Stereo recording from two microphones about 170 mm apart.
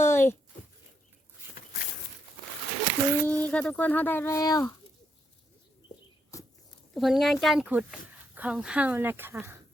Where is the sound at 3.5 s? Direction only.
5° left (ahead or behind).